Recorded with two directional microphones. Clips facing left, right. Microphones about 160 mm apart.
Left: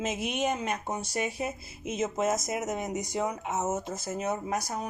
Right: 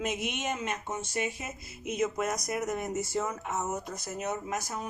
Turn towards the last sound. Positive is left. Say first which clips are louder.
# left 3 dB
turn(degrees=35)  # may be behind; listen again after turning